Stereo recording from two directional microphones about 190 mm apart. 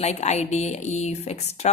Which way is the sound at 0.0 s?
35° left (ahead or behind).